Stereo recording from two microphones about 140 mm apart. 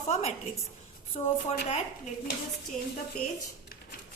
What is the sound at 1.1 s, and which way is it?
Speech, 50° left (ahead or behind).